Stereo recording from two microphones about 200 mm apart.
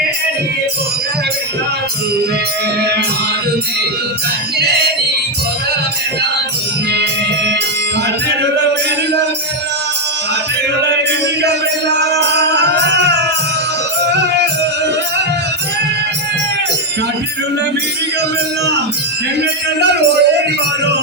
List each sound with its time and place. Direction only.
6.9 s music: 55° right (ahead or behind)
11.9 s music: 60° right (ahead or behind)
19.4 s music: 55° right (ahead or behind)